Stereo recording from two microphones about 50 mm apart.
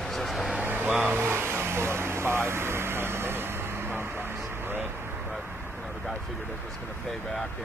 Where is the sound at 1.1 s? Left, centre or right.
Right.